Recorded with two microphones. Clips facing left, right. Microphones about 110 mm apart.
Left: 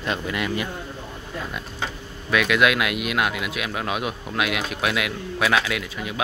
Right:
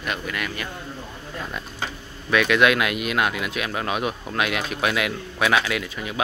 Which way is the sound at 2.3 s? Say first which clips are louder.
Right 1 dB; centre (ahead or behind).